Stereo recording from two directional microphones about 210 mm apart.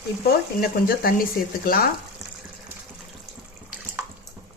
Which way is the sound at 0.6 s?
45° left (ahead or behind).